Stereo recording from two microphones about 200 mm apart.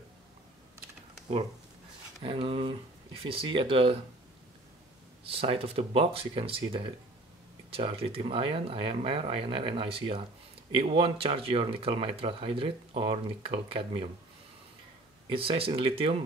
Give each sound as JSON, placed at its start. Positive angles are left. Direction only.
{"t": 2.1, "sound": "speech", "side_deg": -25}
{"t": 5.2, "sound": "speech", "side_deg": -30}
{"t": 15.2, "sound": "speech", "side_deg": -25}